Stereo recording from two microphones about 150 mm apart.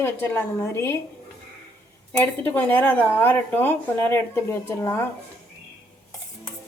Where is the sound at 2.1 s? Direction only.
15° left (ahead or behind).